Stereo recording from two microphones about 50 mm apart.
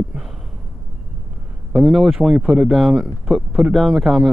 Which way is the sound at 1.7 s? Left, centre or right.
Centre.